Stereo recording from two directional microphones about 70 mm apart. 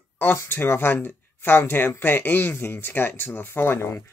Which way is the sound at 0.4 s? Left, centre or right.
Left.